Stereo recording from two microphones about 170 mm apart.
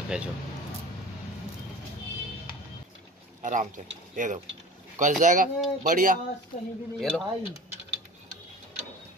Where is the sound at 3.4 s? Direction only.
50° right (ahead or behind).